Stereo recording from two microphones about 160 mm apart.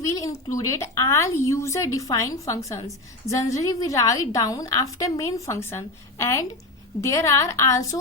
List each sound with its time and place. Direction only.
0.2 s a woman's voice: 20° left (ahead or behind)